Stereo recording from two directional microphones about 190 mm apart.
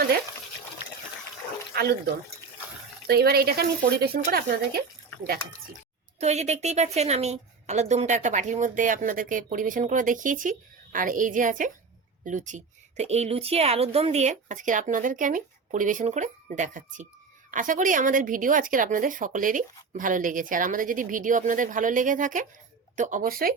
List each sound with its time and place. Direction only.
1.7 s speech: 55° right (ahead or behind)
3.1 s speech: 55° right (ahead or behind)
6.1 s a woman's voice: 35° right (ahead or behind)